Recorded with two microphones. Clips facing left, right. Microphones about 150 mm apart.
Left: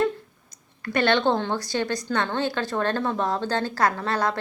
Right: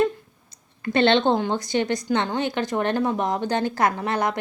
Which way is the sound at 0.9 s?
20° right (ahead or behind).